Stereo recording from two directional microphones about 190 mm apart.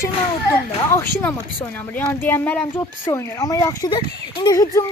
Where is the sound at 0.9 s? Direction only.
10° left (ahead or behind).